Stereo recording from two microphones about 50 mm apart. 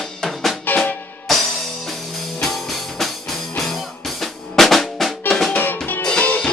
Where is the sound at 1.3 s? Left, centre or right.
Centre.